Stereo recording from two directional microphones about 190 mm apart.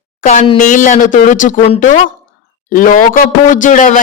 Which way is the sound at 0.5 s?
45° left (ahead or behind).